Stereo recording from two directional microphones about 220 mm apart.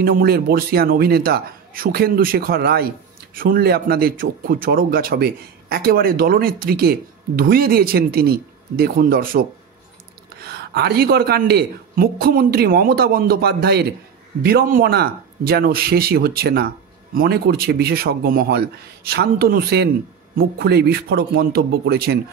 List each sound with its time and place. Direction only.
0.0 s speech: 45° right (ahead or behind)